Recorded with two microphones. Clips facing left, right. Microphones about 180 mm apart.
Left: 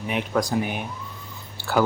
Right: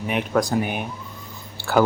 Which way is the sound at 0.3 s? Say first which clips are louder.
Right 3 dB; 60° right (ahead or behind).